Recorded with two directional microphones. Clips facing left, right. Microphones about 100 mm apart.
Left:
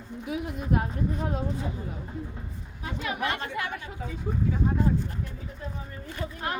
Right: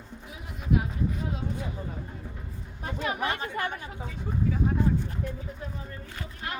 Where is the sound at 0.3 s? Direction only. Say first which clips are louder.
Left 2 dB; 65° left (ahead or behind).